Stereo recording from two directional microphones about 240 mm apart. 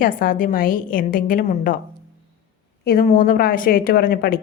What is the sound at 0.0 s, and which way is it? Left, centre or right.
A woman's voice, left.